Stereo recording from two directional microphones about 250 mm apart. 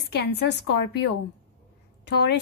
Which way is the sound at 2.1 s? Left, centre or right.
Left.